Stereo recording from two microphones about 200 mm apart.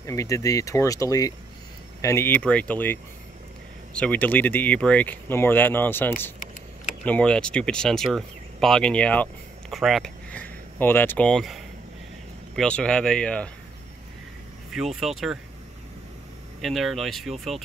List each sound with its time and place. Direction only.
0.0 s speech: 15° left (ahead or behind)
14.7 s speech: centre (ahead or behind)
16.6 s speech: centre (ahead or behind)